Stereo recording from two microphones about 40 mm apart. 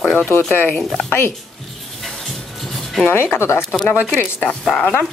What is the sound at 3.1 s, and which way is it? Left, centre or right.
Speech, left.